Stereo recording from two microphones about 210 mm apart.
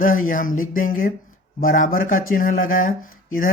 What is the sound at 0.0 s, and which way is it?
Speech, 40° left (ahead or behind).